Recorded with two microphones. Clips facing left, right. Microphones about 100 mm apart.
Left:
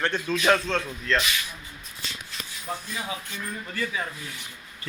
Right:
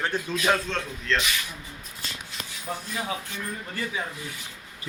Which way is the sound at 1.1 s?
5° left (ahead or behind).